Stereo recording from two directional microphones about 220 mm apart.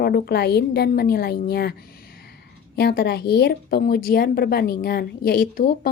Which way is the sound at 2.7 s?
45° left (ahead or behind).